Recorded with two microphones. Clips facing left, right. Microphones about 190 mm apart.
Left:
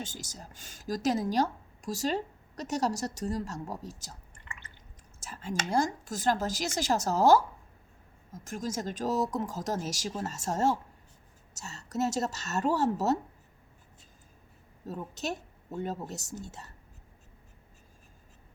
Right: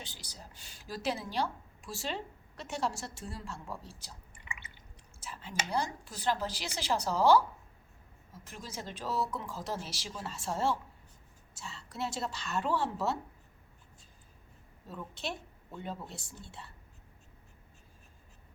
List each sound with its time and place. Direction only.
0.0 s speech: 45° left (ahead or behind)
4.4 s drip: 10° right (ahead or behind)
5.2 s computer keyboard: 45° left (ahead or behind)
5.7 s speech: 45° left (ahead or behind)
14.8 s speech: 40° left (ahead or behind)